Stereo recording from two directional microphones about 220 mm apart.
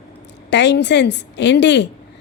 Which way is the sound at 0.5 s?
50° left (ahead or behind).